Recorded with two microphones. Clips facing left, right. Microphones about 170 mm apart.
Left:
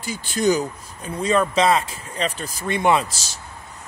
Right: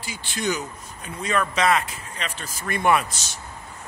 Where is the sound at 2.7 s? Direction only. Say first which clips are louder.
Left 2 dB; 20° left (ahead or behind).